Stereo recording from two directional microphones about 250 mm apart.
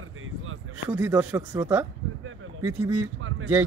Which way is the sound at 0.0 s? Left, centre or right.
Right.